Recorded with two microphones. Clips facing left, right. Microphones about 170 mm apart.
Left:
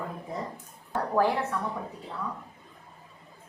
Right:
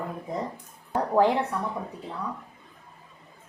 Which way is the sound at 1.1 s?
20° right (ahead or behind).